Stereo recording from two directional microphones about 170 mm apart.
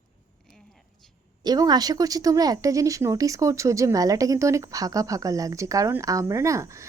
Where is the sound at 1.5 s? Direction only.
25° right (ahead or behind).